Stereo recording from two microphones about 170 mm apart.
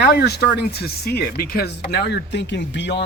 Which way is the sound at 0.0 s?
70° left (ahead or behind).